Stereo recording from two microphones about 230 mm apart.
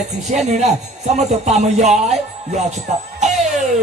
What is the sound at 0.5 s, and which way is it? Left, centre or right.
Music, right.